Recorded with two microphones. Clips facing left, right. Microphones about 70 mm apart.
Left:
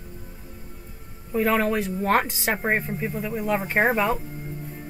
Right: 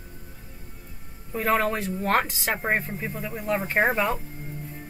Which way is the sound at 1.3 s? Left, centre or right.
Centre.